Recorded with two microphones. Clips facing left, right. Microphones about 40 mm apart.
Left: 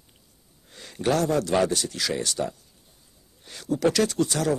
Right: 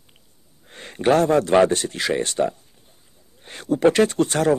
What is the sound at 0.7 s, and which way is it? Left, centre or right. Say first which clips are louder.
A man's voice: right 6 dB; right.